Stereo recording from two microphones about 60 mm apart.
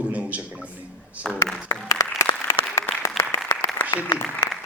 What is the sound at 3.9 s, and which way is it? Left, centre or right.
Speech, left.